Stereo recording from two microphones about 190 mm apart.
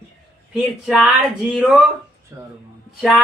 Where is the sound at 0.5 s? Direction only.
5° right (ahead or behind).